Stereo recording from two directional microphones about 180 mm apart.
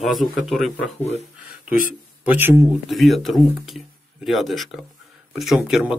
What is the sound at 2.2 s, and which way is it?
Speech, 10° right (ahead or behind).